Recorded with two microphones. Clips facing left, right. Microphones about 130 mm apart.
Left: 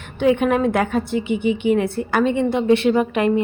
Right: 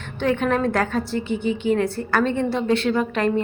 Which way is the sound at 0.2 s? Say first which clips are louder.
Left 4 dB; 10° left (ahead or behind).